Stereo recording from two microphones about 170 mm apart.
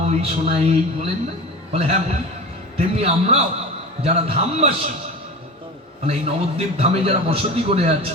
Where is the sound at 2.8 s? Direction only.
35° right (ahead or behind).